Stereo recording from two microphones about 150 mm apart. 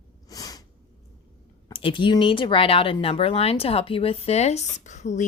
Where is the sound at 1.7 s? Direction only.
35° left (ahead or behind).